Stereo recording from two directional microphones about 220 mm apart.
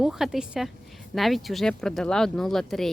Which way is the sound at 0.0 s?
Centre (ahead or behind).